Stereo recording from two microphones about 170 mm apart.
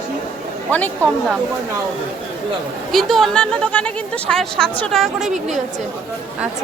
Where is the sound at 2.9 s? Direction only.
Centre (ahead or behind).